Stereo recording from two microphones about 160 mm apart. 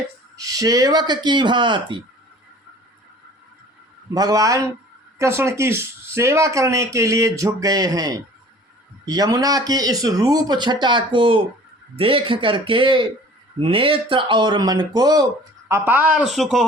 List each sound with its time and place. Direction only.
0.3 s speech: 20° right (ahead or behind)
4.1 s speech: 20° right (ahead or behind)
15.7 s speech: 15° right (ahead or behind)